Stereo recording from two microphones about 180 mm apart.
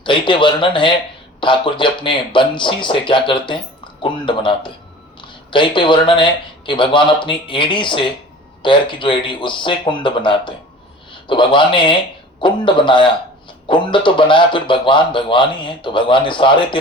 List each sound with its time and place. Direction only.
0.0 s speech: 25° left (ahead or behind)